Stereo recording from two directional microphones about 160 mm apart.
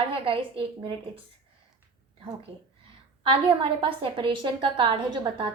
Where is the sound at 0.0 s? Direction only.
35° right (ahead or behind).